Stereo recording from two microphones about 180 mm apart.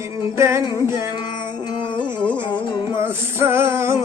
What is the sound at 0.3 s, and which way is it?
Music, 15° right (ahead or behind).